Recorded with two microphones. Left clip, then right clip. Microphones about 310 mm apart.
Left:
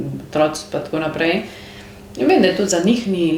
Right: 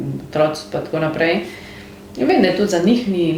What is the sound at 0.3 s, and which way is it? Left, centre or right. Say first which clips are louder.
Speech: even; left.